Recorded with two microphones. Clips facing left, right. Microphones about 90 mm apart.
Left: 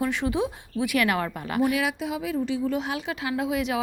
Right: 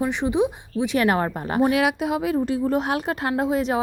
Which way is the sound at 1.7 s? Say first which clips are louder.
Right 6 dB; 60° right (ahead or behind).